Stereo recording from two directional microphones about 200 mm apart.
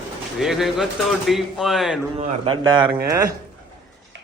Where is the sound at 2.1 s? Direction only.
25° right (ahead or behind).